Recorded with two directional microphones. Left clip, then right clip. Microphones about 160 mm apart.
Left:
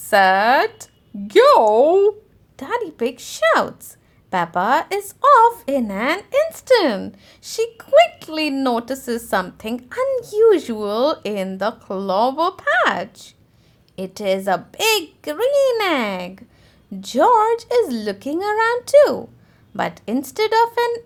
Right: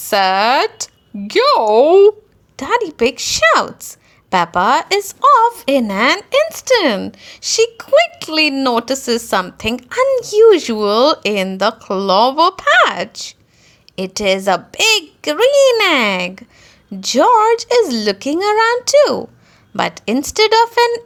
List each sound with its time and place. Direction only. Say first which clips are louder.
0.1 s a woman's voice: right 1 dB; 25° right (ahead or behind)